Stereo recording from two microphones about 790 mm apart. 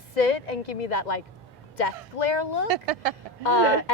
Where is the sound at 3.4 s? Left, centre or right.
Left.